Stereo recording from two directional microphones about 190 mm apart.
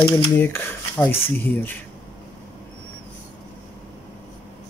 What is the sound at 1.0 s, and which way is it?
Speech, 30° left (ahead or behind).